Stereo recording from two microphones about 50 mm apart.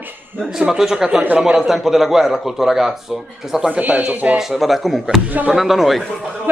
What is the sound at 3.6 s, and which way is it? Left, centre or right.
Speech, right.